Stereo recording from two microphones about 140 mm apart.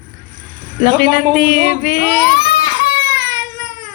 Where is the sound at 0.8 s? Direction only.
75° left (ahead or behind).